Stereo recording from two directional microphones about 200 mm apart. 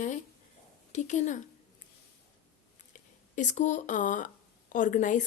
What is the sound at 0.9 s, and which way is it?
Speech, 35° left (ahead or behind).